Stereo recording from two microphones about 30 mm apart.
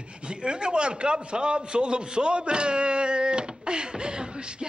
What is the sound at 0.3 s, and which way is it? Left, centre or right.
Speech, right.